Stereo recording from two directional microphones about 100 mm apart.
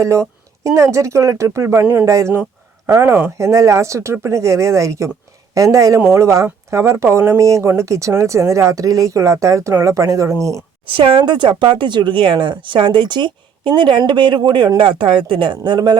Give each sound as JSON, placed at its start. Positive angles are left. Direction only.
{"t": 0.0, "sound": "speech", "side_deg": -30}
{"t": 10.8, "sound": "speech", "side_deg": -60}